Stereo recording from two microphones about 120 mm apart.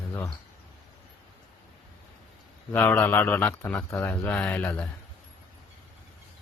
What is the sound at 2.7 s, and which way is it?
Speech, 15° left (ahead or behind).